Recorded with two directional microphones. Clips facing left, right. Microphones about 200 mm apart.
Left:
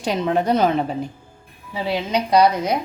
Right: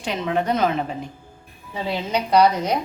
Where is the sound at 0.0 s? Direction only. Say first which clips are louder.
Left 3 dB; 35° left (ahead or behind).